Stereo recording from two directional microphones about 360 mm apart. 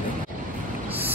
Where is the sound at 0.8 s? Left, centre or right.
Centre.